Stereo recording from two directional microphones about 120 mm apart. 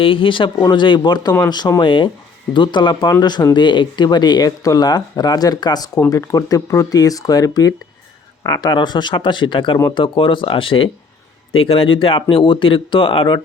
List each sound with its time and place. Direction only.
0.0 s speech: 45° left (ahead or behind)